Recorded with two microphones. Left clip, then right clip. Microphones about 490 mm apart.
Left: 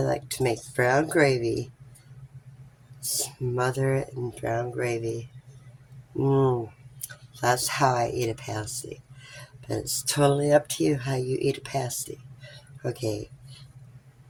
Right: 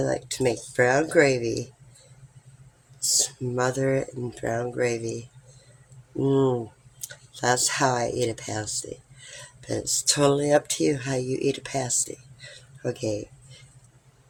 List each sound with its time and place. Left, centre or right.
0.0 s speech: left
3.1 s speech: left
6.2 s speech: left